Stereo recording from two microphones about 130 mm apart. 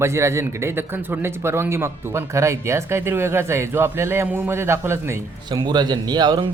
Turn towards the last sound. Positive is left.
turn(degrees=-35)  # may be behind; listen again after turning